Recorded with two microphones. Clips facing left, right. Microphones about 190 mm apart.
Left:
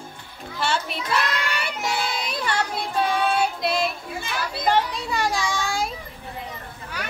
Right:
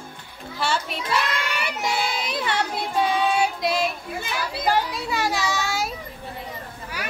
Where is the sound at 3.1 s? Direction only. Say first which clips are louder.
Even; 10° right (ahead or behind).